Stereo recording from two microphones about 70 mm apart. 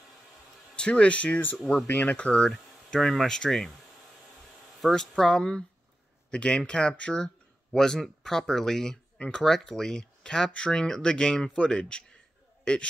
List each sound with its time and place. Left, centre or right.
0.7 s speech: centre
1.6 s speech: centre
1.9 s speech: left
4.8 s speech: centre